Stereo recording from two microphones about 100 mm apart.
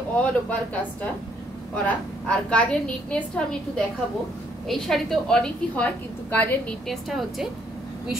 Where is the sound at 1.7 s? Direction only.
15° left (ahead or behind).